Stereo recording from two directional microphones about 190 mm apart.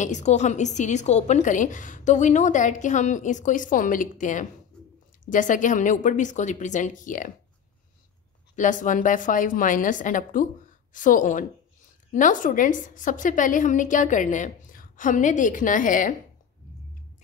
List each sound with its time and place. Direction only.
0.0 s a woman's voice: 40° left (ahead or behind)
8.5 s a woman's voice: 40° left (ahead or behind)